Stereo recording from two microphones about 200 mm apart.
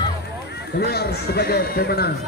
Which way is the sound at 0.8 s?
50° left (ahead or behind).